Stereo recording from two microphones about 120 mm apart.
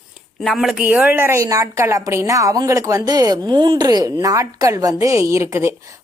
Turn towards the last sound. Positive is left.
turn(degrees=-25)  # may be behind; listen again after turning